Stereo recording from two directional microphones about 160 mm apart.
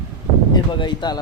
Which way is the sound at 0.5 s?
30° left (ahead or behind).